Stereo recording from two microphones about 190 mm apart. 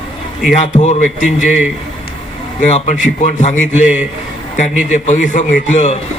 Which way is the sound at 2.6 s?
40° left (ahead or behind).